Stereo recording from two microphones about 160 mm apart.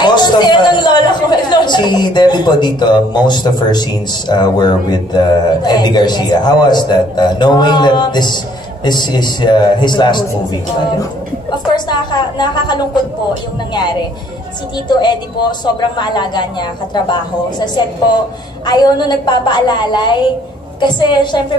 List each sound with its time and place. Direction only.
0.0 s speech: 25° left (ahead or behind)
11.5 s speech: 25° left (ahead or behind)
14.9 s speech: 30° left (ahead or behind)